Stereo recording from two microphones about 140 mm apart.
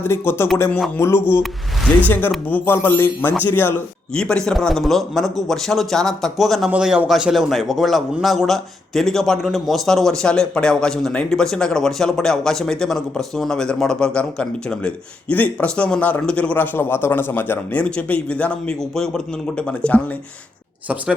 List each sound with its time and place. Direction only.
0.0 s speech: 15° left (ahead or behind)
2.5 s a man's voice: 15° left (ahead or behind)
20.8 s speech: 10° right (ahead or behind)